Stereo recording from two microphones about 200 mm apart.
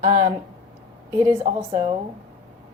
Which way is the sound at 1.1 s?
15° right (ahead or behind).